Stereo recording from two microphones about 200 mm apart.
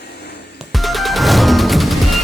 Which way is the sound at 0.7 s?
Centre (ahead or behind).